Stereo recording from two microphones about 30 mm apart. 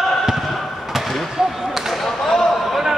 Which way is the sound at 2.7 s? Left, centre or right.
Centre.